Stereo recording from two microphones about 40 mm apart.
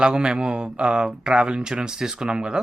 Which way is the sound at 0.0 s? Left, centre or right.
Right.